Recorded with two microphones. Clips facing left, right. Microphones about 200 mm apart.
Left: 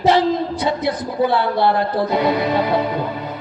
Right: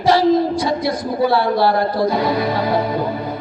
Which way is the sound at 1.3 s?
20° left (ahead or behind).